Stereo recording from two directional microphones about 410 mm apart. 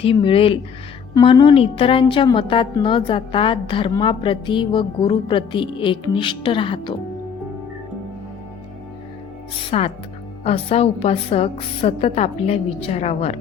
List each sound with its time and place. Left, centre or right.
0.0 s a woman's voice: centre
9.6 s a woman's voice: centre